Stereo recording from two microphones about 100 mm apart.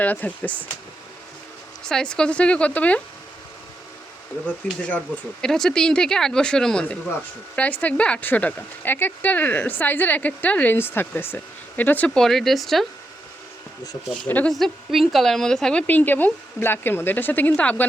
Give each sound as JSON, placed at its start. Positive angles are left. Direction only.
{"t": 0.0, "sound": "speech", "side_deg": 15}
{"t": 1.9, "sound": "speech", "side_deg": 5}
{"t": 4.4, "sound": "speech", "side_deg": 15}
{"t": 5.4, "sound": "a woman's voice", "side_deg": 5}
{"t": 14.3, "sound": "speech", "side_deg": 15}
{"t": 14.5, "sound": "a woman's voice", "side_deg": 0}
{"t": 15.9, "sound": "speech", "side_deg": 15}